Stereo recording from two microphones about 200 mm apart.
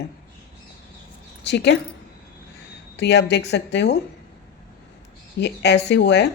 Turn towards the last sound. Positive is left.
turn(degrees=60)  # may be behind; listen again after turning